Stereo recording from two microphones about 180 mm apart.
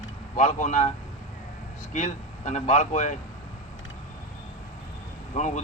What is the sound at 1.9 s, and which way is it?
Speech, 40° left (ahead or behind).